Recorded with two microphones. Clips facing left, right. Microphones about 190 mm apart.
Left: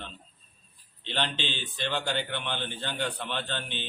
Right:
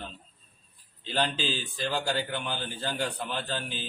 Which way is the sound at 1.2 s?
40° right (ahead or behind).